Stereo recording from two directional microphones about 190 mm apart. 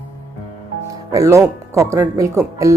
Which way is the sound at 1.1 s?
15° right (ahead or behind).